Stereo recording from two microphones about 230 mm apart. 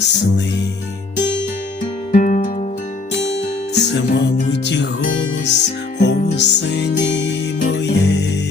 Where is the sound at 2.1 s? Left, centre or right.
Left.